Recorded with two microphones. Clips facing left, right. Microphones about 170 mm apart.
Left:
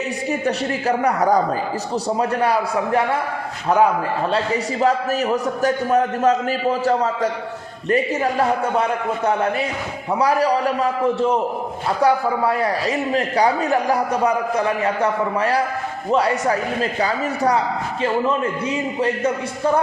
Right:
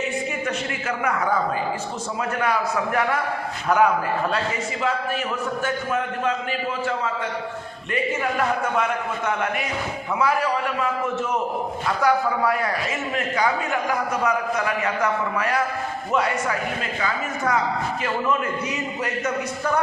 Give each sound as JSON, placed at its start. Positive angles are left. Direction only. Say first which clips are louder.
{"t": 0.3, "sound": "a man's voice", "louder": "left 6 dB", "side_deg": 35}
{"t": 4.3, "sound": "a man's voice", "louder": "left 5 dB", "side_deg": 40}